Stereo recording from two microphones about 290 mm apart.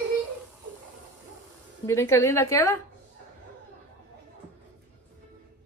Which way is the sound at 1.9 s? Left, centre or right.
Centre.